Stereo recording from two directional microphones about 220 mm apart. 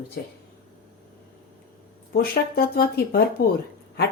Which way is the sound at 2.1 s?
45° left (ahead or behind).